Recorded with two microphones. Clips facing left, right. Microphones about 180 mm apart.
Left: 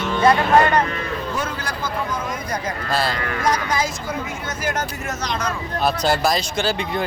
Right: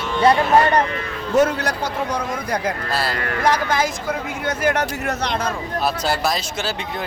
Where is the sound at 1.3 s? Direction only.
65° right (ahead or behind).